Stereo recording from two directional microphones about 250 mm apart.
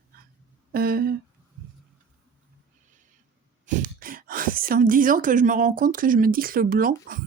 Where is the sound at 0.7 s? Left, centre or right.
Right.